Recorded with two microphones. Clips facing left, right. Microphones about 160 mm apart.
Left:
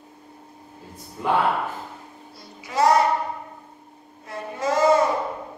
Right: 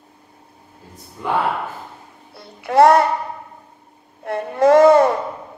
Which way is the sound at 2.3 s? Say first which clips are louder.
Right 11 dB; 60° right (ahead or behind).